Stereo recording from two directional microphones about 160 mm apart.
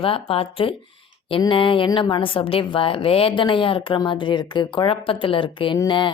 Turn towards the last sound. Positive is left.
turn(degrees=30)  # may be behind; listen again after turning